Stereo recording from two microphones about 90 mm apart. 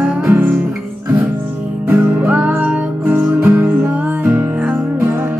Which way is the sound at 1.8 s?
20° right (ahead or behind).